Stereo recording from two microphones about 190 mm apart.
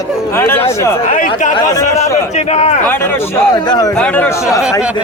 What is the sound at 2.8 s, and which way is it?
A man's voice, 10° left (ahead or behind).